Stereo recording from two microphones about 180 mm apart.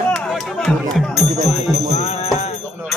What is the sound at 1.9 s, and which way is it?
Music, 35° left (ahead or behind).